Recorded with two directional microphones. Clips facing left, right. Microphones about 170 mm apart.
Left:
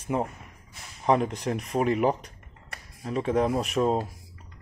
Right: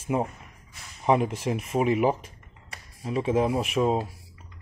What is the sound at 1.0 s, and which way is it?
Speech, 5° right (ahead or behind).